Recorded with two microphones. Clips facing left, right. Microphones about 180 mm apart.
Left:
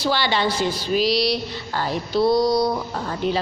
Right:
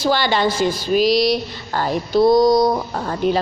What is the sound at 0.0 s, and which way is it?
Speech, 45° right (ahead or behind).